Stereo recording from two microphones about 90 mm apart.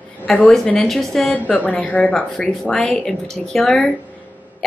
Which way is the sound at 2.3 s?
5° left (ahead or behind).